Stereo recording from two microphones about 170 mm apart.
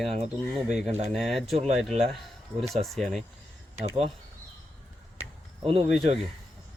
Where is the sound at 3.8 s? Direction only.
40° right (ahead or behind).